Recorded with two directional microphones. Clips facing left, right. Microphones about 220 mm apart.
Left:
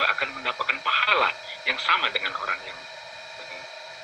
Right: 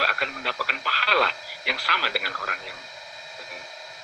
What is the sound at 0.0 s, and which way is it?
Speech, 25° right (ahead or behind).